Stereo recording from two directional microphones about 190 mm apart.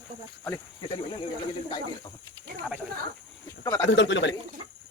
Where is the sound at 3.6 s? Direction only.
20° left (ahead or behind).